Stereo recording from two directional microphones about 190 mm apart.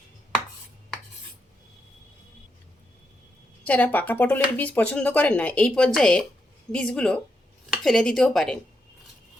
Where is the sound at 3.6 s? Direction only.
5° left (ahead or behind).